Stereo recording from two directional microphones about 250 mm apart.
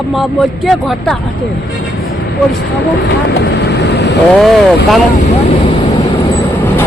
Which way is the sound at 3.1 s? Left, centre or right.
Left.